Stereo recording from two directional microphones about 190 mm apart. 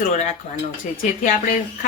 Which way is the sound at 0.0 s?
35° left (ahead or behind).